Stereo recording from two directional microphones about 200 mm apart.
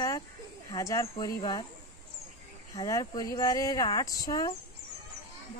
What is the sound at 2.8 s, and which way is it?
Speech, 15° left (ahead or behind).